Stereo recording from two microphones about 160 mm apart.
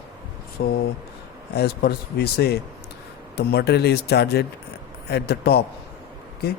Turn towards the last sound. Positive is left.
turn(degrees=80)